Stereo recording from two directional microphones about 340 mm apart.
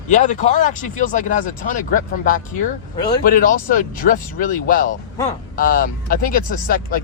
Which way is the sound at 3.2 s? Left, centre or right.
Left.